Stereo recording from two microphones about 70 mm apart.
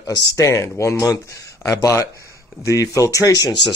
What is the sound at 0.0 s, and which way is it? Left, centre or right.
Speech, left.